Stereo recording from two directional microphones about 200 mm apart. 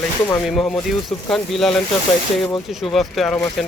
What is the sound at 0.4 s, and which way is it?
Speech, centre (ahead or behind).